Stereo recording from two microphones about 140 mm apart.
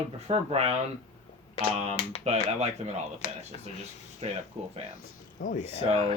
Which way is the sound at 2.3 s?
50° right (ahead or behind).